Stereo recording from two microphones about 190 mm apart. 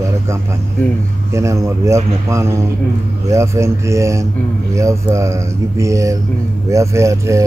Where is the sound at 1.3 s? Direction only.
15° right (ahead or behind).